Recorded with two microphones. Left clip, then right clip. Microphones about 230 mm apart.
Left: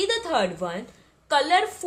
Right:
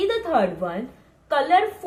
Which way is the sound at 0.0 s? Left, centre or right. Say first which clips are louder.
Right 3 dB; left.